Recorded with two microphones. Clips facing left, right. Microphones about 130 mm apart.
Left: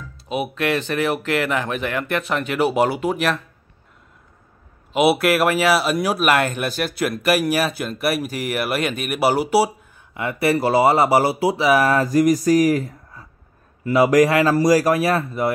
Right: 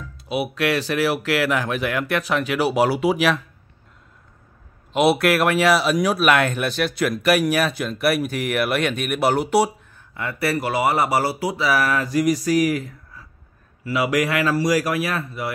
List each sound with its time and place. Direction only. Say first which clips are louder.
0.3 s speech: even; 5° right (ahead or behind)
4.9 s speech: left 1 dB; centre (ahead or behind)
10.1 s speech: left 4 dB; 20° left (ahead or behind)
11.9 s a man's voice: left 4 dB; 40° left (ahead or behind)